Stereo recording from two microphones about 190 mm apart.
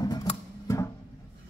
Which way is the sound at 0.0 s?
20° left (ahead or behind).